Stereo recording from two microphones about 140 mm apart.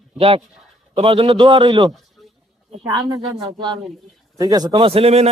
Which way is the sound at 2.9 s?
30° right (ahead or behind).